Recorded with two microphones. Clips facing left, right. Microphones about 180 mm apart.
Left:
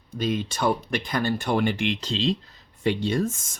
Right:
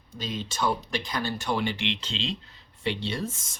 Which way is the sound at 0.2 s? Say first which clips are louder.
Left 5 dB; 55° left (ahead or behind).